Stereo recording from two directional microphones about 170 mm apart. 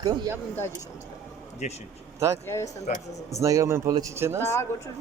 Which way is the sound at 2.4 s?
15° left (ahead or behind).